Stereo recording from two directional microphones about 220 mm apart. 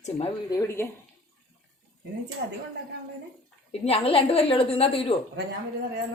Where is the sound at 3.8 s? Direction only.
25° left (ahead or behind).